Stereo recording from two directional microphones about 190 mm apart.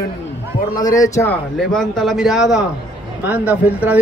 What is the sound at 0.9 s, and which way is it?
Speech, 15° left (ahead or behind).